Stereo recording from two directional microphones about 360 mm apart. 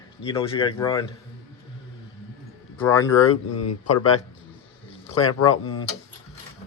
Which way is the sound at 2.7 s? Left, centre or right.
Centre.